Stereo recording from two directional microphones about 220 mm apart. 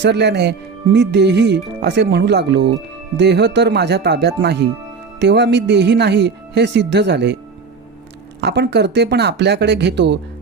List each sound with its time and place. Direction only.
0.0 s speech: 50° right (ahead or behind)
8.4 s speech: 50° right (ahead or behind)